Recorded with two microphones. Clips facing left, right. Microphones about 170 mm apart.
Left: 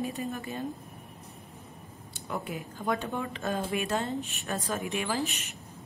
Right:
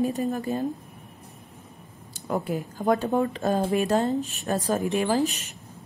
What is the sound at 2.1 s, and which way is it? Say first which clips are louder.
A woman's voice: right 8 dB; 40° right (ahead or behind).